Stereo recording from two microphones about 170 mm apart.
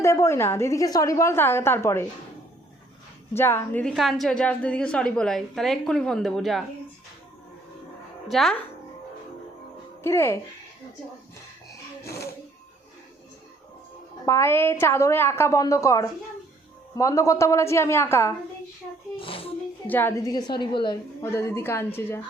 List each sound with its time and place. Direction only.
0.0 s a woman's voice: 15° left (ahead or behind)
3.3 s a woman's voice: 15° left (ahead or behind)
8.3 s a woman's voice: centre (ahead or behind)
10.0 s a woman's voice: 15° left (ahead or behind)
14.3 s a woman's voice: 15° left (ahead or behind)
19.1 s a child's voice: 30° left (ahead or behind)
19.9 s a woman's voice: 10° left (ahead or behind)